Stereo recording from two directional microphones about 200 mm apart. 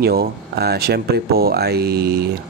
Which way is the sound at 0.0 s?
50° right (ahead or behind).